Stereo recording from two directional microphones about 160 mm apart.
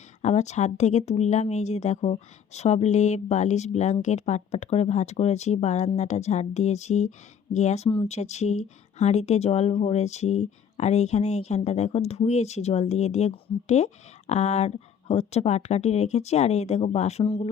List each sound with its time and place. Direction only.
0.2 s speech: 45° left (ahead or behind)